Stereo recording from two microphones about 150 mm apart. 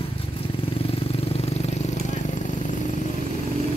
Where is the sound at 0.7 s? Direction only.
40° left (ahead or behind).